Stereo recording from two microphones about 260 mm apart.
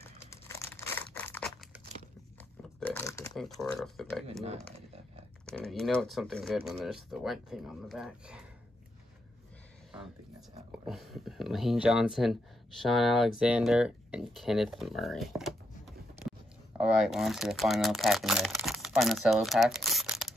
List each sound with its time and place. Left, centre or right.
0.0 s crumpling: centre
2.8 s a sound: centre
3.8 s speech: centre
4.3 s speech: right
5.5 s speech: centre
10.9 s speech: centre